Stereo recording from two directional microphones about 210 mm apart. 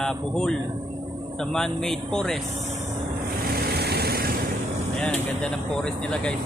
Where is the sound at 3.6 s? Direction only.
50° right (ahead or behind).